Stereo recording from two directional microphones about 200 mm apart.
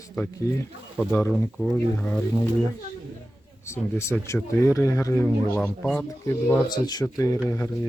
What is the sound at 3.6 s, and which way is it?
Speech, 15° left (ahead or behind).